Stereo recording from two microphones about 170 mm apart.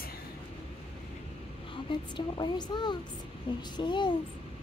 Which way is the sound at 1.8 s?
25° left (ahead or behind).